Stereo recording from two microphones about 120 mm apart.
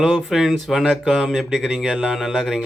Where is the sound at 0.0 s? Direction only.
Centre (ahead or behind).